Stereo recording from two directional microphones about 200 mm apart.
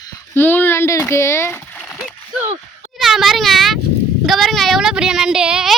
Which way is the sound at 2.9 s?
Centre (ahead or behind).